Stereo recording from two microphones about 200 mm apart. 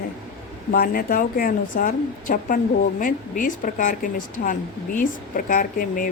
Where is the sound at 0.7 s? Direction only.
45° left (ahead or behind).